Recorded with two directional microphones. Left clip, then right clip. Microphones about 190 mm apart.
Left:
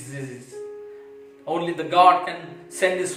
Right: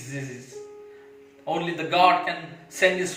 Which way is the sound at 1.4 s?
15° left (ahead or behind).